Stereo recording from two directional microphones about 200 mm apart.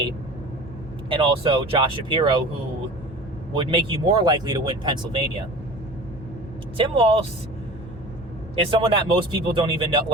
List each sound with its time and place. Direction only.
1.1 s speech: 25° right (ahead or behind)
3.5 s speech: 25° right (ahead or behind)
6.7 s speech: 30° right (ahead or behind)
8.7 s speech: 25° right (ahead or behind)